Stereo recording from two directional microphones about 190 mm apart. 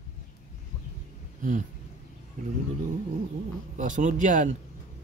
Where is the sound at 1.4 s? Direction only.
40° right (ahead or behind).